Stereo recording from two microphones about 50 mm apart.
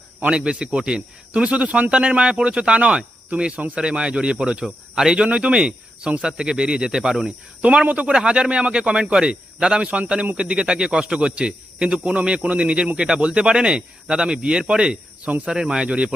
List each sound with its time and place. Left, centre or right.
0.2 s speech: right
7.9 s speech: right